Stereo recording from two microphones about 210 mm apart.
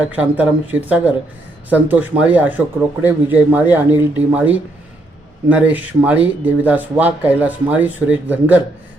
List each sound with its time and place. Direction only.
0.1 s speech: 5° right (ahead or behind)